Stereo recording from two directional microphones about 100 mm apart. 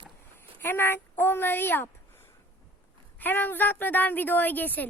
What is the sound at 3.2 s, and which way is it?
A woman's voice, 20° left (ahead or behind).